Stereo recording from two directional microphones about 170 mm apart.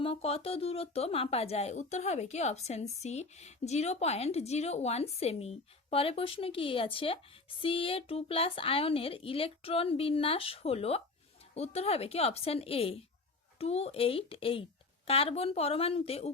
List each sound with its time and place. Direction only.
0.0 s speech: 35° left (ahead or behind)